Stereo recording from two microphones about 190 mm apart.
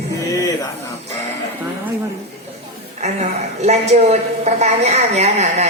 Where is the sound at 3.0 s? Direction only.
35° right (ahead or behind).